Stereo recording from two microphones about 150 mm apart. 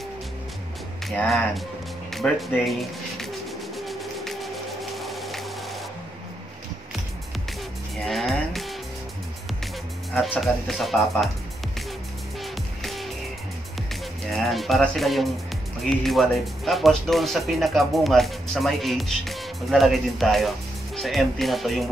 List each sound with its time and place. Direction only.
1.0 s speech: 5° left (ahead or behind)
3.7 s a sound: centre (ahead or behind)
8.0 s music: centre (ahead or behind)
10.2 s speech: centre (ahead or behind)
12.8 s music: centre (ahead or behind)
14.3 s speech: centre (ahead or behind)